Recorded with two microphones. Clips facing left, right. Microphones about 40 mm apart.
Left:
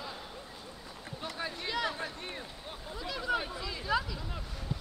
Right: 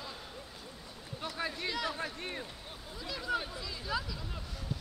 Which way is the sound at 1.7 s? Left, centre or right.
Centre.